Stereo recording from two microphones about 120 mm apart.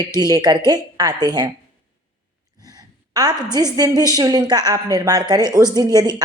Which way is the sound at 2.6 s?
30° right (ahead or behind).